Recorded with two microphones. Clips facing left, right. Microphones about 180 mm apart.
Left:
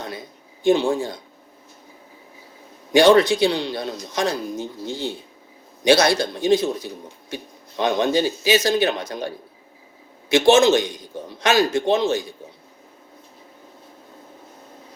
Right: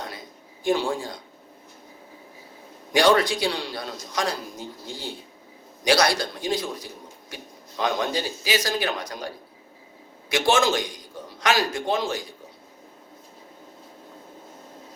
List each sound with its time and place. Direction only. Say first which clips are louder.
0.6 s a man's voice: left 6 dB; 25° left (ahead or behind)
2.9 s a man's voice: left 6 dB; 25° left (ahead or behind)